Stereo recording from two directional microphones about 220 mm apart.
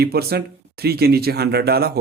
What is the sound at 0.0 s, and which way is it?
Speech, 45° right (ahead or behind).